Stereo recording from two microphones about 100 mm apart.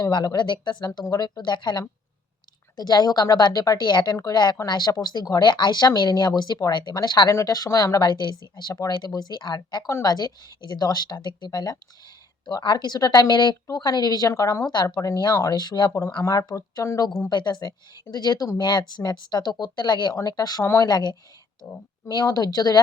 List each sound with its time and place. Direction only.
0.0 s a woman's voice: 45° left (ahead or behind)
7.3 s a woman's voice: 35° left (ahead or behind)
15.9 s a woman's voice: 30° left (ahead or behind)
17.2 s a woman's voice: 45° left (ahead or behind)